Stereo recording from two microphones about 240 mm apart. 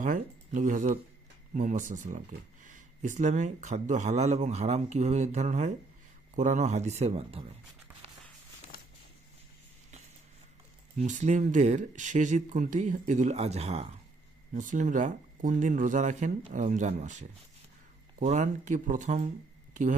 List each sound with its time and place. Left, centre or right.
0.0 s speech: right
10.9 s speech: right